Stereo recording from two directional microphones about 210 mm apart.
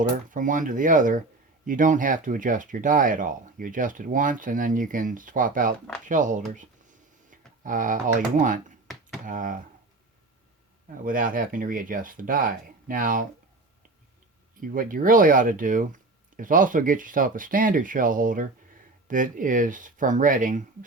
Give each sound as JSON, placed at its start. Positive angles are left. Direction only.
{"t": 0.3, "sound": "speech", "side_deg": -40}
{"t": 8.9, "sound": "a sound", "side_deg": 0}
{"t": 9.2, "sound": "speech", "side_deg": -40}
{"t": 10.9, "sound": "speech", "side_deg": -40}
{"t": 14.6, "sound": "speech", "side_deg": -40}